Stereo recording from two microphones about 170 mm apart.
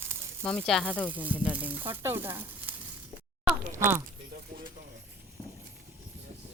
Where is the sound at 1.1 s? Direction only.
10° right (ahead or behind).